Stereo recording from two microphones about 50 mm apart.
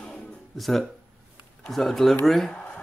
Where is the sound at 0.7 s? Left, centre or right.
Centre.